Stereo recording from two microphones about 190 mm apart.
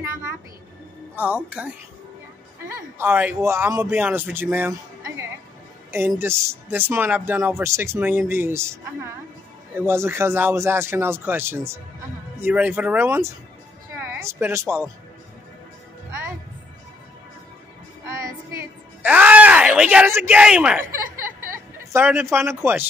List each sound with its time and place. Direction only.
0.0 s a sound: 10° right (ahead or behind)
1.1 s a man's voice: 5° right (ahead or behind)
3.0 s a man's voice: 10° right (ahead or behind)
19.0 s speech: 10° right (ahead or behind)
21.9 s a man's voice: 10° right (ahead or behind)